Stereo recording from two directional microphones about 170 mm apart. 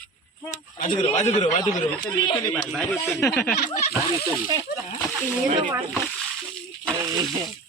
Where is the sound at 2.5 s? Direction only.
5° left (ahead or behind).